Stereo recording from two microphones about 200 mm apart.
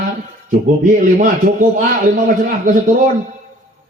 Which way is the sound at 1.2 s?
40° right (ahead or behind).